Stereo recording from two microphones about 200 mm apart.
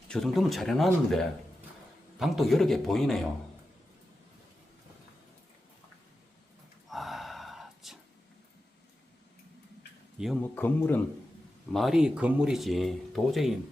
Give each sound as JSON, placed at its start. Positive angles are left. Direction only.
{"t": 0.1, "sound": "speech", "side_deg": 0}
{"t": 6.9, "sound": "gasp", "side_deg": 0}
{"t": 10.4, "sound": "speech", "side_deg": 10}
{"t": 11.7, "sound": "speech", "side_deg": 0}